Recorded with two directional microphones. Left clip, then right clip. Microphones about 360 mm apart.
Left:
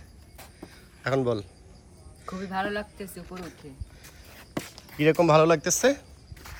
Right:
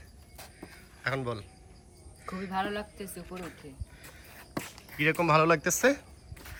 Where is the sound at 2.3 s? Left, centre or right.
Centre.